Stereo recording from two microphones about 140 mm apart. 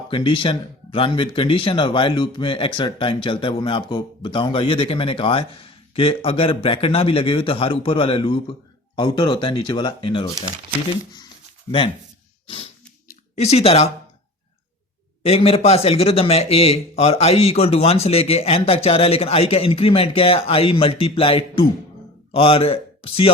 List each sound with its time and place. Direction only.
0.1 s speech: 35° left (ahead or behind)
11.7 s speech: 25° left (ahead or behind)
13.3 s speech: 50° left (ahead or behind)
15.2 s speech: 45° left (ahead or behind)